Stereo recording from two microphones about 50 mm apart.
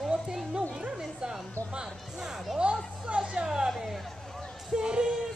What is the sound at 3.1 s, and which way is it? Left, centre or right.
Speech, centre.